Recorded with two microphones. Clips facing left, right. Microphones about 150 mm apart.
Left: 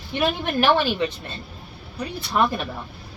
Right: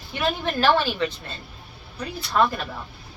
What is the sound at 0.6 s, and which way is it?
Speech, 20° left (ahead or behind).